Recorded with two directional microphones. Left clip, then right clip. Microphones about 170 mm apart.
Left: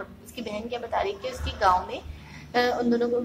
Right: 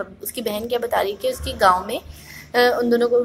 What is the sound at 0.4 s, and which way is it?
A woman's voice, 35° right (ahead or behind).